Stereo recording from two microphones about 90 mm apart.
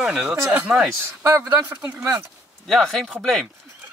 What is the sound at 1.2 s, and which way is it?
Speech, 35° right (ahead or behind).